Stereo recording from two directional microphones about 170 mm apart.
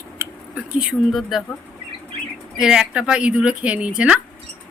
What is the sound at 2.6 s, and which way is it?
A woman's voice, 5° right (ahead or behind).